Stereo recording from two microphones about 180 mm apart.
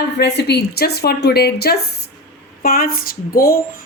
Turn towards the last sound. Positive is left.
turn(degrees=55)  # may be behind; listen again after turning